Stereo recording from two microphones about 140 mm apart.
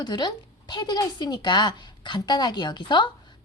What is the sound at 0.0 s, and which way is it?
Speech, 30° left (ahead or behind).